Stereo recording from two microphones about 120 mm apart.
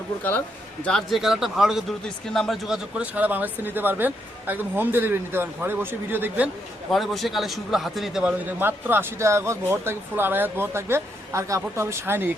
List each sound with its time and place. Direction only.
0.2 s speech: 15° left (ahead or behind); by 6.5 s 15° right (ahead or behind)
6.9 s speech: centre (ahead or behind); by 12.3 s 20° right (ahead or behind)